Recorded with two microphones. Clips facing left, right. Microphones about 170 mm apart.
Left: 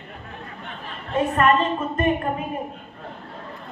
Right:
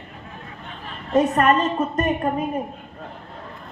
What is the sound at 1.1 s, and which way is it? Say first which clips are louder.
A man's voice: right 2 dB; 40° right (ahead or behind).